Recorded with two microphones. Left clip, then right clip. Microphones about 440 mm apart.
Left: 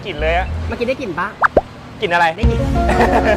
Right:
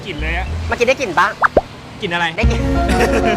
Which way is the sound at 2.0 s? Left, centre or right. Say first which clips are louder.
Left 4 dB; left.